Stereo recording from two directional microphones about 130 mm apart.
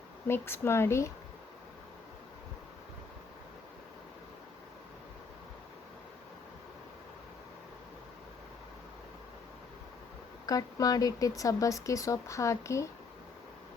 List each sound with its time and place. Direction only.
0.3 s speech: 20° left (ahead or behind)
10.4 s speech: 30° left (ahead or behind)